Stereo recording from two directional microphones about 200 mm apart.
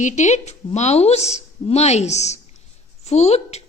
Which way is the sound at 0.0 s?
35° left (ahead or behind).